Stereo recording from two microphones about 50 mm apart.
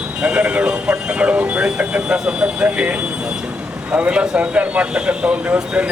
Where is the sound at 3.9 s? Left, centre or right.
Right.